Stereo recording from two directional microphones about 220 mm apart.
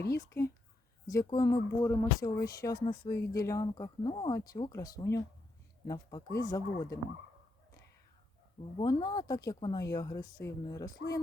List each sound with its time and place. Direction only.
0.0 s speech: 15° left (ahead or behind)
8.8 s speech: 20° left (ahead or behind)